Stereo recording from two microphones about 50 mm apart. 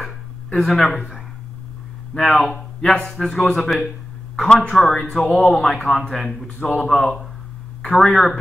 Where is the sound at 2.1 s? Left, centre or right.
Centre.